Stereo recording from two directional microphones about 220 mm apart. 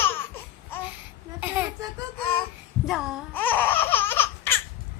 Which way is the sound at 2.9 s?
Centre (ahead or behind).